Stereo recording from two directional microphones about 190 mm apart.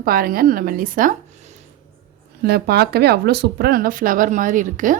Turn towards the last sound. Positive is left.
turn(degrees=-45)  # may be behind; listen again after turning